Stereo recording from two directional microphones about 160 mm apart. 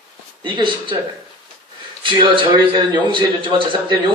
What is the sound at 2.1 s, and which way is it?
A man's voice, 30° right (ahead or behind).